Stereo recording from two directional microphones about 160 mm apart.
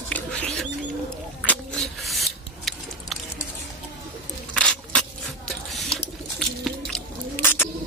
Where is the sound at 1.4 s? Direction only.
5° left (ahead or behind).